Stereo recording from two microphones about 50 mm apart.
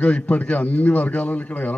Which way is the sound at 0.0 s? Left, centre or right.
Left.